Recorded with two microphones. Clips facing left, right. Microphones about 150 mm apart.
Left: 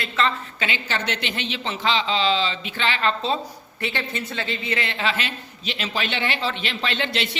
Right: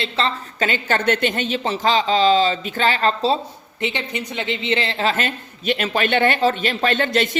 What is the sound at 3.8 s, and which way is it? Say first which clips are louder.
Speech: right 3 dB; 15° right (ahead or behind).